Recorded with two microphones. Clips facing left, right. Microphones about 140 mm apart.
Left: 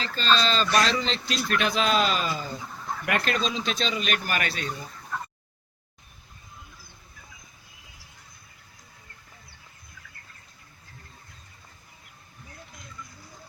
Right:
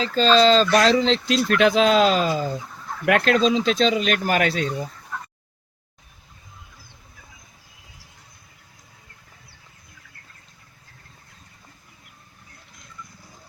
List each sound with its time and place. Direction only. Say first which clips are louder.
0.3 s speech: right 8 dB; 90° right